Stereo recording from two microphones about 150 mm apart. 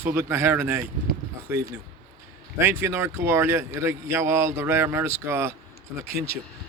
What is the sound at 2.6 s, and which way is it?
Speech, 15° right (ahead or behind).